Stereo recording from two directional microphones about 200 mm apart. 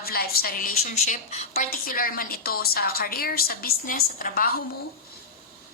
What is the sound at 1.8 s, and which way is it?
A woman's voice, 45° left (ahead or behind).